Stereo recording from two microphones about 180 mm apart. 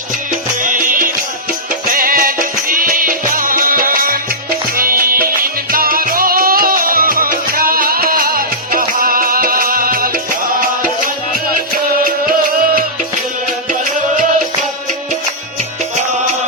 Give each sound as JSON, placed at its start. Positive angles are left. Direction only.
{"t": 0.3, "sound": "music", "side_deg": -45}